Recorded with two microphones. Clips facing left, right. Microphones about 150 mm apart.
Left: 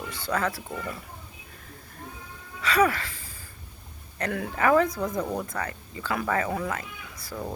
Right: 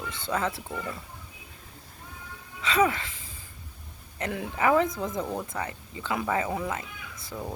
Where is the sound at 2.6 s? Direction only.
20° right (ahead or behind).